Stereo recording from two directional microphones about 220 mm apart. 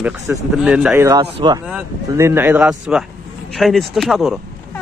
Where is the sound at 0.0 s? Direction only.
5° right (ahead or behind).